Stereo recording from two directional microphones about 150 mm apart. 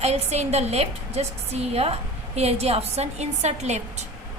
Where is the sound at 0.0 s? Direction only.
45° right (ahead or behind).